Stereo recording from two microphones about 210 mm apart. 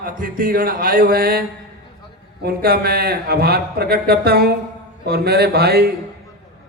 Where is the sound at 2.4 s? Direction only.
45° right (ahead or behind).